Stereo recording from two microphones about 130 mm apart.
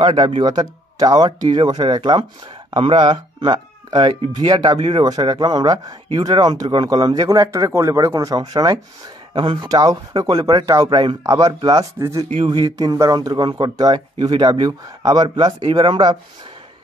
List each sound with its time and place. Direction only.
0.0 s speech: 35° right (ahead or behind)